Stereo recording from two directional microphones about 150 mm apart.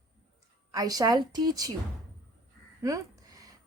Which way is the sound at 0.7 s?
25° right (ahead or behind).